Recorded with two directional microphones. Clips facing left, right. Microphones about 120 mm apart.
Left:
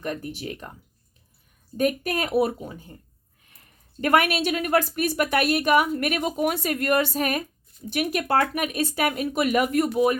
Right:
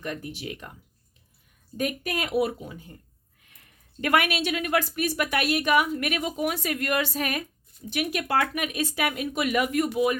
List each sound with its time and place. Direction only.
0.0 s speech: 40° left (ahead or behind)
1.7 s speech: 40° left (ahead or behind)